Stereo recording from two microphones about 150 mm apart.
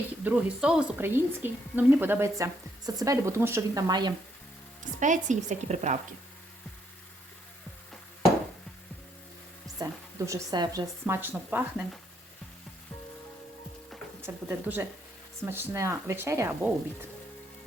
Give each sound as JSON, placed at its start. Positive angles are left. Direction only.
{"t": 0.3, "sound": "a woman's voice", "side_deg": -10}
{"t": 4.8, "sound": "a woman's voice", "side_deg": -55}
{"t": 9.7, "sound": "a woman's voice", "side_deg": -25}
{"t": 14.2, "sound": "a woman's voice", "side_deg": -15}